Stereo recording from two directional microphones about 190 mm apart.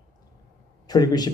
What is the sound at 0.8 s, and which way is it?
Speech, 20° left (ahead or behind).